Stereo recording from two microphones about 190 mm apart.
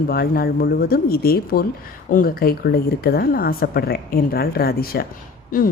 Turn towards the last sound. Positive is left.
turn(degrees=50)  # may be behind; listen again after turning